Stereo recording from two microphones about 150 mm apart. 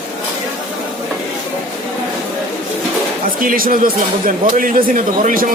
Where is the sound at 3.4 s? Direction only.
70° right (ahead or behind).